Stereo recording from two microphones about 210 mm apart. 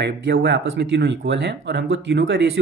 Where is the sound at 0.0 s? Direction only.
50° right (ahead or behind).